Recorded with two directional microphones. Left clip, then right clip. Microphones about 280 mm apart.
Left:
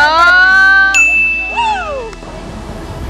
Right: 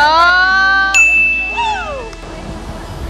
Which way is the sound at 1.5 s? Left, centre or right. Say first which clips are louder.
Left 3 dB; left.